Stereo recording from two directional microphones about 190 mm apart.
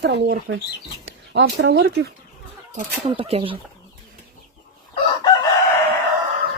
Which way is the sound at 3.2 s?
30° right (ahead or behind).